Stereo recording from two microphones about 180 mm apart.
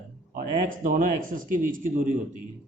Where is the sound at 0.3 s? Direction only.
50° right (ahead or behind).